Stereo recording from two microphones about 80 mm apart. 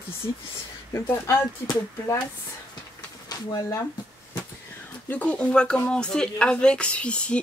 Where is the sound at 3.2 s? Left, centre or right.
Left.